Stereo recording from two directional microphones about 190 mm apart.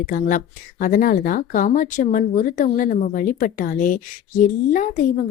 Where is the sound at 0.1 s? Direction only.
45° left (ahead or behind).